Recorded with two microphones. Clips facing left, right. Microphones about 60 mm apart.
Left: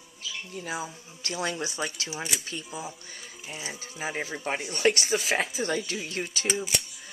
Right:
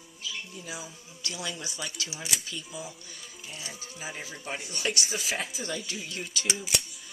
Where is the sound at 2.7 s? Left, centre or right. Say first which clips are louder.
Left 3 dB; left.